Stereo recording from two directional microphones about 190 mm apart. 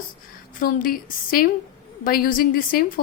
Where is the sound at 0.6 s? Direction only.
50° left (ahead or behind).